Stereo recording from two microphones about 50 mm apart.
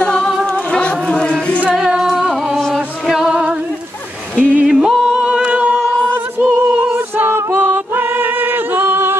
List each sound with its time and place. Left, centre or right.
0.0 s music: centre
0.5 s a sound: left
1.8 s music: centre
4.4 s a sound: right
4.6 s yodeling: centre
6.4 s music: right
7.3 s a capella: right